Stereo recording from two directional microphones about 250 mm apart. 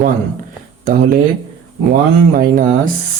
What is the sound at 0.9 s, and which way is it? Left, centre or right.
Speech, right.